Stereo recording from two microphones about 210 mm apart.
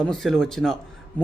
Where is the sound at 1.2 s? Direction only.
10° left (ahead or behind).